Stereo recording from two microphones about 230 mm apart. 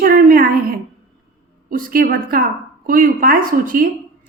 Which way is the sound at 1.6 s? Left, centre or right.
Right.